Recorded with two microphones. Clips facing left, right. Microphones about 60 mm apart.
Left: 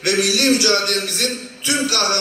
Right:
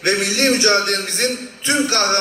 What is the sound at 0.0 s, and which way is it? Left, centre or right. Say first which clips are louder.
A man's voice: even; right.